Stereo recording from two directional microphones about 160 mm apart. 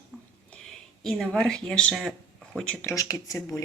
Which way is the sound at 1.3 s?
5° left (ahead or behind).